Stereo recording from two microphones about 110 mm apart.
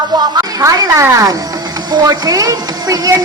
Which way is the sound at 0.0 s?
40° right (ahead or behind).